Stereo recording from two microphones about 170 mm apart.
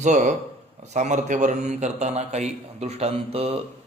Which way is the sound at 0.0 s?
45° right (ahead or behind).